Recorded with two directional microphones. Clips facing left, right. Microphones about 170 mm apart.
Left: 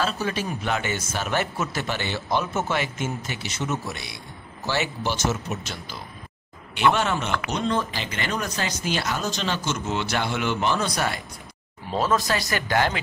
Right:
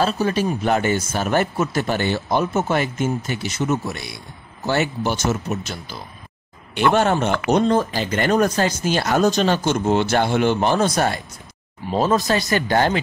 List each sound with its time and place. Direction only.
0.0 s speech: 35° right (ahead or behind)
6.9 s speech: 50° right (ahead or behind)
11.9 s speech: 30° right (ahead or behind)